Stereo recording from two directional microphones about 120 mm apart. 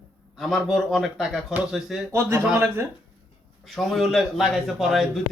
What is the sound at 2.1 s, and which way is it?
Speech, 20° right (ahead or behind).